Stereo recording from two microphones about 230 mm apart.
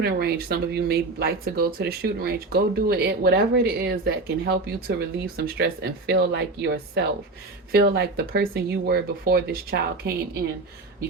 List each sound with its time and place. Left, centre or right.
0.0 s speech: right